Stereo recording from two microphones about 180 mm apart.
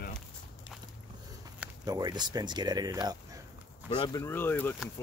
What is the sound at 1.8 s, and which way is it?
Speech, 20° right (ahead or behind).